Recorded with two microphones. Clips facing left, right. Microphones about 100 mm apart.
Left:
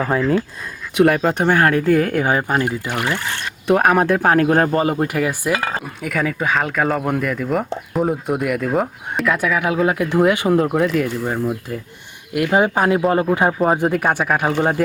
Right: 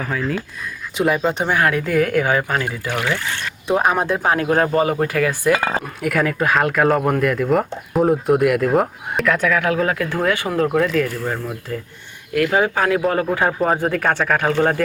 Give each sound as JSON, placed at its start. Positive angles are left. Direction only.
{"t": 0.0, "sound": "speech", "side_deg": 30}
{"t": 0.9, "sound": "speech", "side_deg": 55}
{"t": 3.7, "sound": "speech", "side_deg": 60}
{"t": 4.4, "sound": "speech", "side_deg": 35}
{"t": 4.9, "sound": "speech", "side_deg": 20}
{"t": 5.5, "sound": "speech", "side_deg": -35}
{"t": 5.8, "sound": "speech", "side_deg": 0}
{"t": 10.7, "sound": "speech", "side_deg": 10}